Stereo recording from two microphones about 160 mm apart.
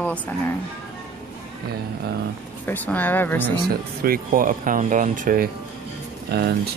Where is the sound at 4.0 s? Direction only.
65° right (ahead or behind).